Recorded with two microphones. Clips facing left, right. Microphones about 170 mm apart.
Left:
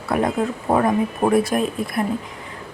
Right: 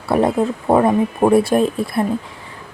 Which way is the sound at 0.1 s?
30° right (ahead or behind).